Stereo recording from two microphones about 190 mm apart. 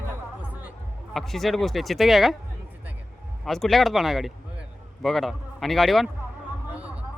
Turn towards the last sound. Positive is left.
turn(degrees=-10)  # may be behind; listen again after turning